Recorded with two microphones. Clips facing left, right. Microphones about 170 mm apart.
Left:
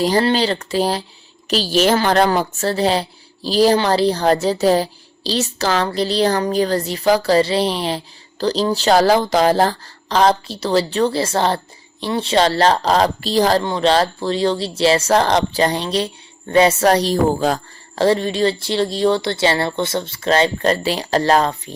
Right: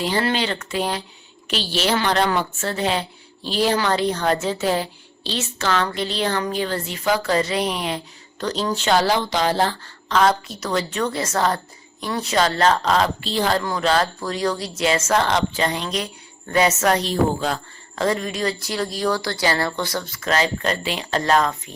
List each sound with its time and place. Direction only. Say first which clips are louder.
0.0 s a woman's voice: left 6 dB; 35° left (ahead or behind)